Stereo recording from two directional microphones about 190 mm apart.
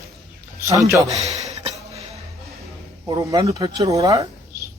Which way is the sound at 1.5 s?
35° right (ahead or behind).